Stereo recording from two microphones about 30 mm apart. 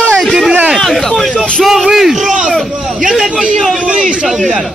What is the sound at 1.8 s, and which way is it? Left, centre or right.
Speech, centre.